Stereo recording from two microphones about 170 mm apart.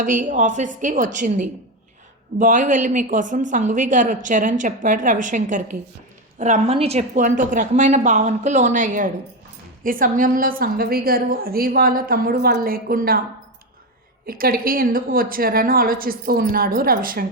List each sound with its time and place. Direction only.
0.0 s a woman's voice: 50° right (ahead or behind)
14.3 s a woman's voice: 60° right (ahead or behind)